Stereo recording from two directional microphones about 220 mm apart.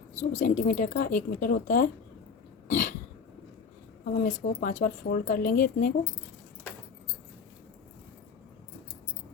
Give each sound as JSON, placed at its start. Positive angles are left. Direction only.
{"t": 0.2, "sound": "speech", "side_deg": 35}
{"t": 2.6, "sound": "throat clearing", "side_deg": 35}
{"t": 4.1, "sound": "speech", "side_deg": 40}